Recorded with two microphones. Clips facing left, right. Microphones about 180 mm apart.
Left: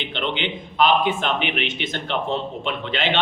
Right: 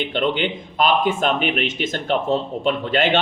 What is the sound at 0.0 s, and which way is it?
A man's voice, 45° right (ahead or behind).